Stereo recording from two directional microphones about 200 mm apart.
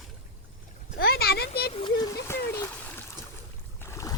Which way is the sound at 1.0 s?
50° left (ahead or behind).